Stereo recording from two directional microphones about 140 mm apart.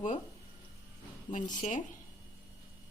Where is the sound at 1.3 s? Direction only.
65° left (ahead or behind).